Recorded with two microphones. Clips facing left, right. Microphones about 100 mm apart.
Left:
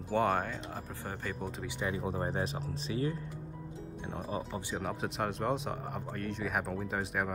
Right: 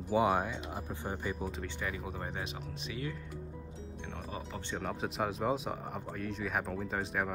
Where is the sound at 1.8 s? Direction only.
30° left (ahead or behind).